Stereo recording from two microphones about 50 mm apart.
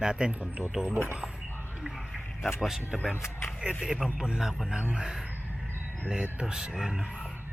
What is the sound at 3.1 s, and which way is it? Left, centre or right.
Speech, left.